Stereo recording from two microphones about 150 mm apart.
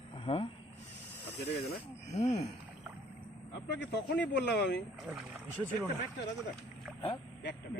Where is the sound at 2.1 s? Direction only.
45° left (ahead or behind).